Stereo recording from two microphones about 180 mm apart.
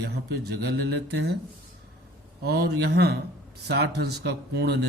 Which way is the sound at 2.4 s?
65° right (ahead or behind).